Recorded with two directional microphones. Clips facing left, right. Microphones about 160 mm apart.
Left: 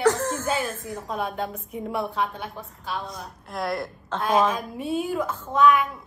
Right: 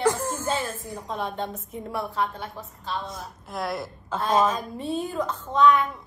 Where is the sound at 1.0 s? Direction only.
5° left (ahead or behind).